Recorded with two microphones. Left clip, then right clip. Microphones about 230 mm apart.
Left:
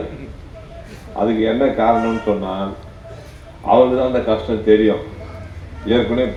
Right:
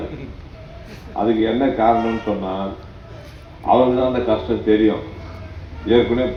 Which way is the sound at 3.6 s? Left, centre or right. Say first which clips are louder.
Left 2 dB; left.